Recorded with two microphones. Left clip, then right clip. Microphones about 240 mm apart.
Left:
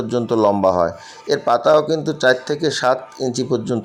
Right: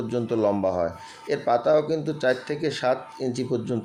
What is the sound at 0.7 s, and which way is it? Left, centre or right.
Speech, centre.